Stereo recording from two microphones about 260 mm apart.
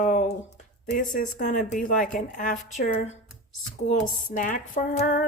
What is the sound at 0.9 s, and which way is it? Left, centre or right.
Speech, left.